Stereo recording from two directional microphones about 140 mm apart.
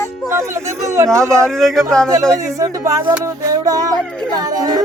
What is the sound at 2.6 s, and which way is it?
Music, 20° right (ahead or behind).